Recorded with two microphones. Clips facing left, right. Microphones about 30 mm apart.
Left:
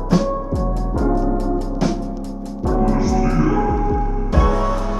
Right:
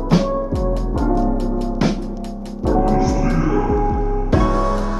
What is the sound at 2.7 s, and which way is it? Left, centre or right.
Music, right.